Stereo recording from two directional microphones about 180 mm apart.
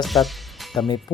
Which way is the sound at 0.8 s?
25° left (ahead or behind).